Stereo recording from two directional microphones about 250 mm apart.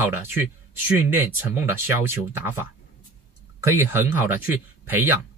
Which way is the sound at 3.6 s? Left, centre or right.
Centre.